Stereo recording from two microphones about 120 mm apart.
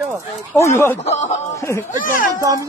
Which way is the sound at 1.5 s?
25° left (ahead or behind).